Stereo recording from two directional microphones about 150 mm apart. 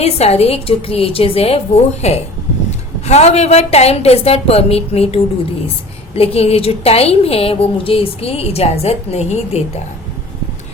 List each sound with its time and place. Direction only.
0.0 s a woman's voice: 45° left (ahead or behind)